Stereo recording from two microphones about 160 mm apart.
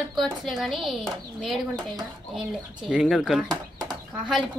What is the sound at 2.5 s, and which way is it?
Speech, 5° right (ahead or behind).